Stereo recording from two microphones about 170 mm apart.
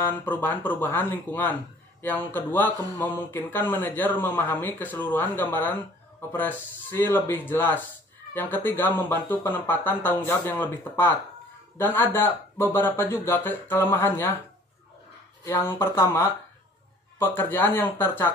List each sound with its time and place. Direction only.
0.0 s speech: 10° left (ahead or behind)
15.4 s speech: 15° left (ahead or behind)